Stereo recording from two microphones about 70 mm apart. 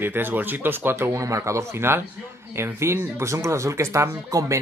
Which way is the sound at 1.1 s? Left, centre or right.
Right.